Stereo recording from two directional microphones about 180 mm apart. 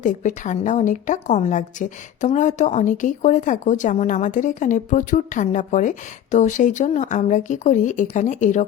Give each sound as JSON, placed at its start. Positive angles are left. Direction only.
{"t": 0.0, "sound": "a woman's voice", "side_deg": 45}